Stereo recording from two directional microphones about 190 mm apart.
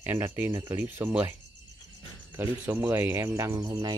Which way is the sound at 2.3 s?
10° right (ahead or behind).